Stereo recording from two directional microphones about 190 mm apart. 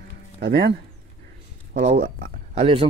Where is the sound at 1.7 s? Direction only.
40° right (ahead or behind).